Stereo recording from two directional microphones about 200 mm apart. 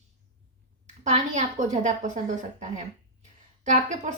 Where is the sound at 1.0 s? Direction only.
35° right (ahead or behind).